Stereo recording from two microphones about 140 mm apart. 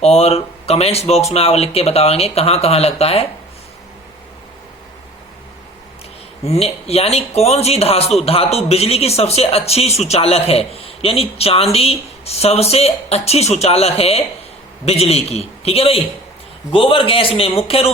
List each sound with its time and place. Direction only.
0.0 s speech: 50° left (ahead or behind)
6.4 s a man's voice: 50° left (ahead or behind)